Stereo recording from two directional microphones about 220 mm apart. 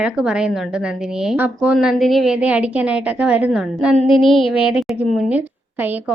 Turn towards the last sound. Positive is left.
turn(degrees=-5)  # may be behind; listen again after turning